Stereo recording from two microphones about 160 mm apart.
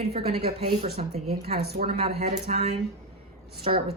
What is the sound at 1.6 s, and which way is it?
Speech, 75° right (ahead or behind).